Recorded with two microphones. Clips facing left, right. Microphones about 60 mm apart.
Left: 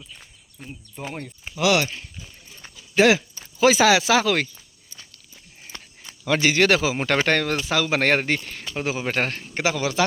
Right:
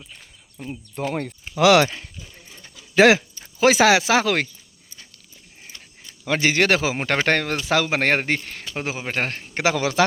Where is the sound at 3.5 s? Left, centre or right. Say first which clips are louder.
Right 1 dB; right.